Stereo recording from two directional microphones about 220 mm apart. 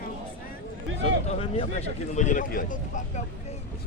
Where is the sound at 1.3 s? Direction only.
30° left (ahead or behind).